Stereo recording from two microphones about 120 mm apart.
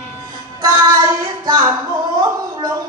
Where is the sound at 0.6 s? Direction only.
35° right (ahead or behind).